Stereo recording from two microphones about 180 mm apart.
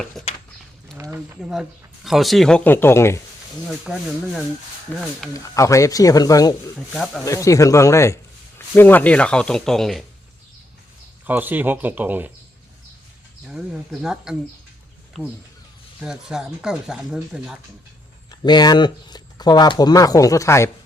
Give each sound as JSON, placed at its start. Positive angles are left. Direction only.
{"t": 0.0, "sound": "speech", "side_deg": 5}
{"t": 0.9, "sound": "speech", "side_deg": -15}
{"t": 1.4, "sound": "speech", "side_deg": 0}
{"t": 3.7, "sound": "speech", "side_deg": 0}
{"t": 4.9, "sound": "speech", "side_deg": 10}
{"t": 6.7, "sound": "speech", "side_deg": 0}
{"t": 7.3, "sound": "speech", "side_deg": 15}
{"t": 11.3, "sound": "speech", "side_deg": -10}
{"t": 13.5, "sound": "speech", "side_deg": -5}
{"t": 16.0, "sound": "speech", "side_deg": -5}
{"t": 18.3, "sound": "speech", "side_deg": 25}